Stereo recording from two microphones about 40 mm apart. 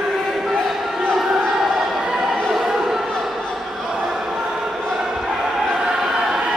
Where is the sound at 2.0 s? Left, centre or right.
Centre.